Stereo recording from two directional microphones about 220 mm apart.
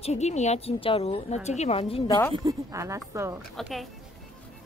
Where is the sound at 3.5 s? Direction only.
Centre (ahead or behind).